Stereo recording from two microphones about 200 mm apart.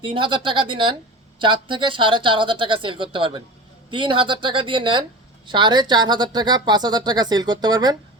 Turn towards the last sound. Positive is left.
turn(degrees=-20)  # may be behind; listen again after turning